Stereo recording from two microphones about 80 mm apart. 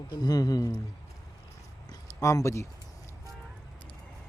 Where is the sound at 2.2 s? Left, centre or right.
Left.